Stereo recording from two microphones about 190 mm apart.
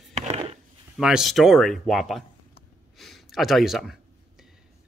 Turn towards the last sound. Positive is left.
turn(degrees=0)  # may be behind; listen again after turning